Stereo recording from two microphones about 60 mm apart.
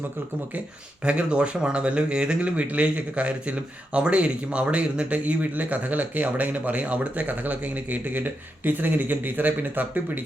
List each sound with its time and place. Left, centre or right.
1.0 s speech: centre